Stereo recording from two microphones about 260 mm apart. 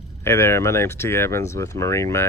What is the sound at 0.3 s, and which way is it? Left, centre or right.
Speech, centre.